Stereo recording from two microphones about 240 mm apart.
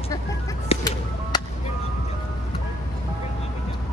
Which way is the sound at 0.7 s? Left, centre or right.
Centre.